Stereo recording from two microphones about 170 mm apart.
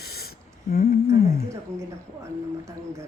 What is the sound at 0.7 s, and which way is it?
Humming, 60° left (ahead or behind).